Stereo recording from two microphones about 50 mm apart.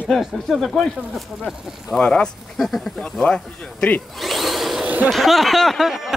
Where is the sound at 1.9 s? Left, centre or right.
Centre.